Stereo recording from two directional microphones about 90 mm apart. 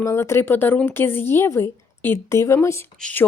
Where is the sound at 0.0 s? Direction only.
30° left (ahead or behind).